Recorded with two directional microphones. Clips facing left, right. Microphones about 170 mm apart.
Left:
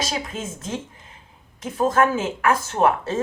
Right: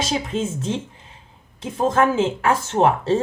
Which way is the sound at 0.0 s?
30° right (ahead or behind).